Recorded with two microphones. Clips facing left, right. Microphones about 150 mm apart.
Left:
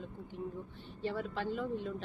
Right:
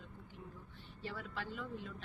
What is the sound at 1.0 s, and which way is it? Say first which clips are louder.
Speech: left 8 dB; 25° left (ahead or behind).